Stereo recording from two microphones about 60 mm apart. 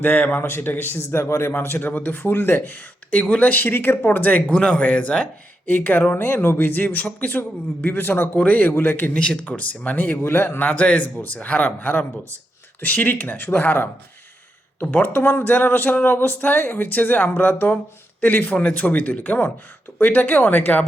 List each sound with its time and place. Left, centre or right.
0.0 s speech: left
0.9 s a man's voice: left
1.8 s speech: left
3.1 s speech: centre
9.1 s speech: centre
10.3 s speech: left
10.7 s speech: left